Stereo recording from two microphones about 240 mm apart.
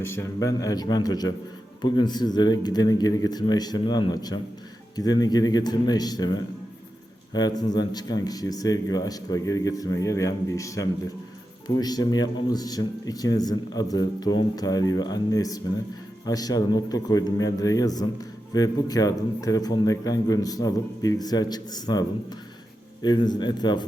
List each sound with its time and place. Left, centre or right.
0.0 s a man's voice: centre
23.0 s a man's voice: centre